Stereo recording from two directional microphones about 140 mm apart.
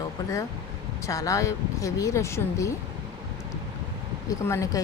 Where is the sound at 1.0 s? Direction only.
25° left (ahead or behind).